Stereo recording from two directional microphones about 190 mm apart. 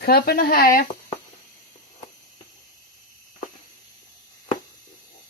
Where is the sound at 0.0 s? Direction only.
55° left (ahead or behind).